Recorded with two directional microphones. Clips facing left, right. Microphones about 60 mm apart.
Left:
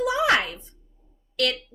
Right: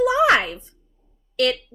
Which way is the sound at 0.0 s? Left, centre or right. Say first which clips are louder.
Right 5 dB; right.